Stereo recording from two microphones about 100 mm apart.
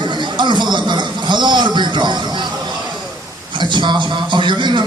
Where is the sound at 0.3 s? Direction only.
50° right (ahead or behind).